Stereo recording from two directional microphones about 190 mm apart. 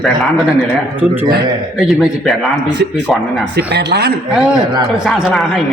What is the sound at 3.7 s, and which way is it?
Speech, 60° right (ahead or behind).